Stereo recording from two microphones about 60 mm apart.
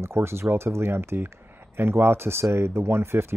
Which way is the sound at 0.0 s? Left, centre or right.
Right.